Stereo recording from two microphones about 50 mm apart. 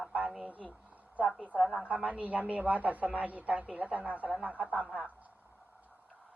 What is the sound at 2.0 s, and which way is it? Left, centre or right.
Speech, right.